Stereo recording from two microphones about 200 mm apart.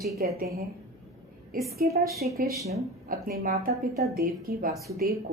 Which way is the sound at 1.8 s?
45° right (ahead or behind).